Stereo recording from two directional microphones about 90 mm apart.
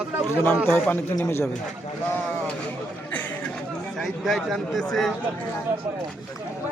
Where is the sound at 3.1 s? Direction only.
20° left (ahead or behind).